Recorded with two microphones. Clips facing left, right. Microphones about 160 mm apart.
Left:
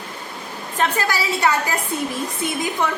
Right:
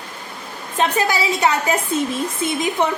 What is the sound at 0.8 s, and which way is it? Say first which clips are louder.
A woman's voice: right 3 dB; 20° right (ahead or behind).